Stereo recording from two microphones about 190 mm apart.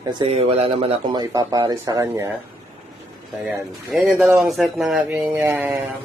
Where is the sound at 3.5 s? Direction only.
5° right (ahead or behind).